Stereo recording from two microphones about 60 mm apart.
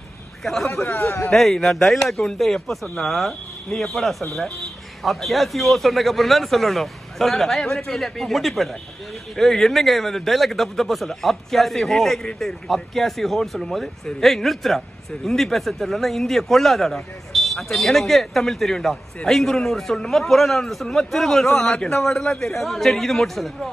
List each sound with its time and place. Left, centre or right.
0.4 s a man's voice: centre
0.8 s speech: left
1.3 s speech: centre